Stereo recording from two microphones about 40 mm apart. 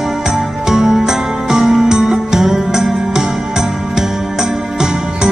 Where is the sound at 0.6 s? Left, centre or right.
Centre.